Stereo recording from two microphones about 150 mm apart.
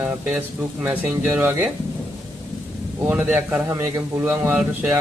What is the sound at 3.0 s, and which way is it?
Speech, 10° right (ahead or behind).